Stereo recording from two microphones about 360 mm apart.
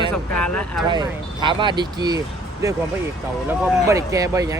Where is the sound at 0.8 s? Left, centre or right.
Centre.